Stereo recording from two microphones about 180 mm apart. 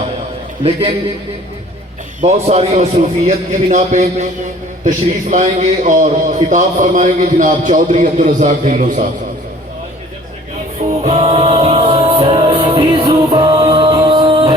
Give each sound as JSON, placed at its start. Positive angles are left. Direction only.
{"t": 0.6, "sound": "a man's voice", "side_deg": -35}
{"t": 2.2, "sound": "a man's voice", "side_deg": -40}
{"t": 11.0, "sound": "music", "side_deg": -35}